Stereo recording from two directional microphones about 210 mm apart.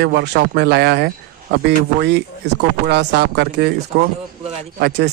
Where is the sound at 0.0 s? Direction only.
50° right (ahead or behind).